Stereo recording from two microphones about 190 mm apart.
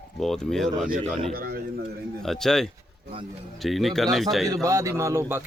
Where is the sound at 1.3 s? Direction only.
50° right (ahead or behind).